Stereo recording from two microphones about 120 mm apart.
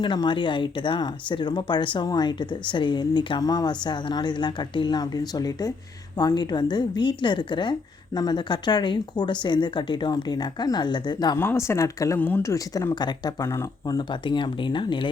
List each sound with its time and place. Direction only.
0.0 s speech: 40° left (ahead or behind)
11.3 s speech: 20° left (ahead or behind); by 13.3 s 35° left (ahead or behind)
13.4 s speech: 25° left (ahead or behind)
13.8 s speech: 40° left (ahead or behind)